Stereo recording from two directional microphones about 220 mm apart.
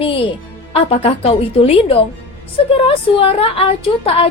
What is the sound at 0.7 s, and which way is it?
A woman's voice, 25° left (ahead or behind).